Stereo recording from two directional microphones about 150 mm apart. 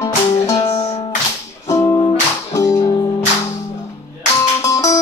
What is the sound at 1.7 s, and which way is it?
Music, 20° left (ahead or behind).